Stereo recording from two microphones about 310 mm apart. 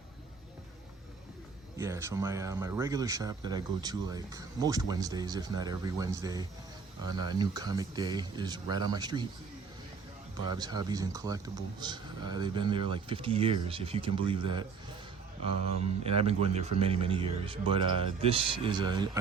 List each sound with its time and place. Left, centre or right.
1.8 s speech: centre
10.4 s speech: centre
16.0 s speech: centre